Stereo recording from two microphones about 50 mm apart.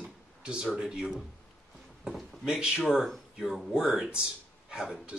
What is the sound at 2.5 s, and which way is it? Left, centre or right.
Speech, centre.